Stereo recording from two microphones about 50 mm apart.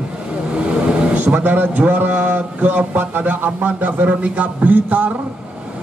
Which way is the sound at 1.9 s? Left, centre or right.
Right.